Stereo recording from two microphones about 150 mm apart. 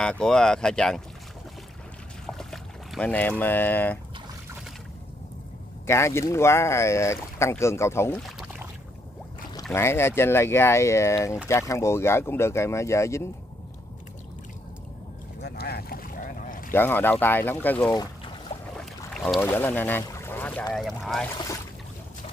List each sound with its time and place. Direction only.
0.0 s speech: 5° left (ahead or behind)
2.2 s boat: centre (ahead or behind)
5.9 s speech: 20° left (ahead or behind)
9.6 s speech: 15° left (ahead or behind)
15.4 s boat: 90° left; by 16.7 s 65° left (ahead or behind)
16.7 s speech: 15° left (ahead or behind)
17.9 s boat: 25° left (ahead or behind)
19.1 s boat: 5° left (ahead or behind)
19.4 s speech: 15° left (ahead or behind)
20.7 s speech: centre (ahead or behind)